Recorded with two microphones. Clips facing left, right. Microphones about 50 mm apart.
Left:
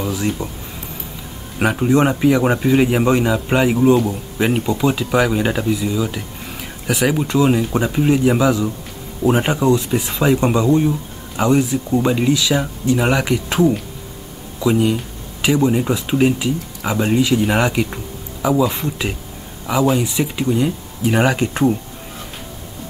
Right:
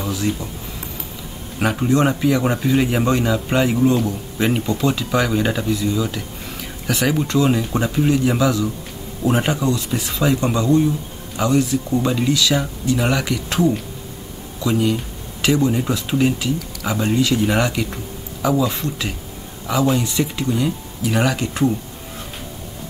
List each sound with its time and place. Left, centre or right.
0.0 s speech: centre
1.6 s speech: centre